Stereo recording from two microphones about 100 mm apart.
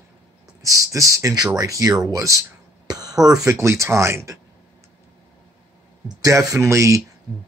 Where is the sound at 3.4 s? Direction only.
30° right (ahead or behind).